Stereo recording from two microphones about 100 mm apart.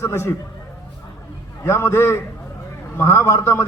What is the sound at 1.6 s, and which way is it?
A man's voice, 25° left (ahead or behind).